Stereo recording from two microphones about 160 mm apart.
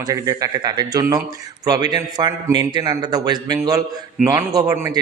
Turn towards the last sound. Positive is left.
turn(degrees=-20)  # may be behind; listen again after turning